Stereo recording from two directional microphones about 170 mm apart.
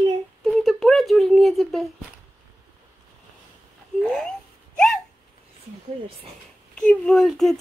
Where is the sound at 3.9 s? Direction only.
5° left (ahead or behind).